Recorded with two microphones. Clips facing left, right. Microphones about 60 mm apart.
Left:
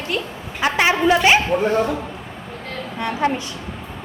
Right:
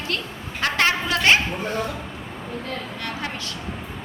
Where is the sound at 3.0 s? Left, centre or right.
Left.